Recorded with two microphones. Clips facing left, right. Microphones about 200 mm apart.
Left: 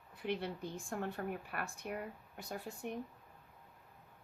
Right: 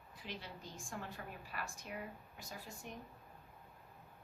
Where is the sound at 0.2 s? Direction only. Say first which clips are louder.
Left 11 dB; 60° left (ahead or behind).